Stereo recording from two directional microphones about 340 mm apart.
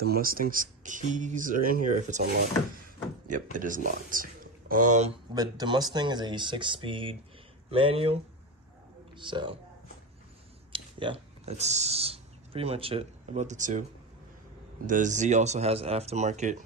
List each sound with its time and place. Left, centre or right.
0.0 s speech: right
10.7 s speech: centre
14.8 s speech: right